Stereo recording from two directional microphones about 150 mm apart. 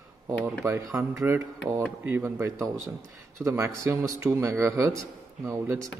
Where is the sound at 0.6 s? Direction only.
15° right (ahead or behind).